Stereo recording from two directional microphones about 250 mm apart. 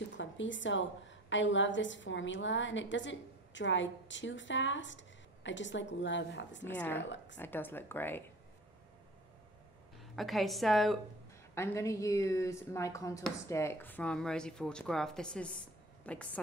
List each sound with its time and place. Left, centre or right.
0.2 s a woman's voice: left
6.8 s speech: centre
9.9 s a woman's voice: centre
11.5 s speech: centre